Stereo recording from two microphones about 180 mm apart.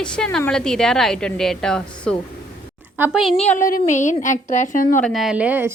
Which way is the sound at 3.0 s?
10° right (ahead or behind).